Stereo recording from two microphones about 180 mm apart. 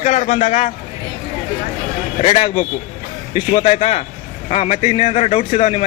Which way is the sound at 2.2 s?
35° left (ahead or behind).